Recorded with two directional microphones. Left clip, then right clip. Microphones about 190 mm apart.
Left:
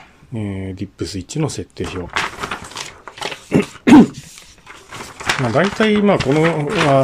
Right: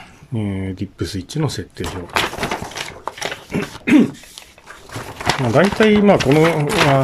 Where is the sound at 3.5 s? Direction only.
30° left (ahead or behind).